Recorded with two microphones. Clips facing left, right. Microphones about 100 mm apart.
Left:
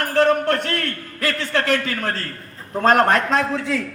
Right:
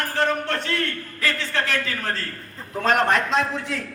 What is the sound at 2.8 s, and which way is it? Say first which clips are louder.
Speech: left 4 dB; 40° left (ahead or behind).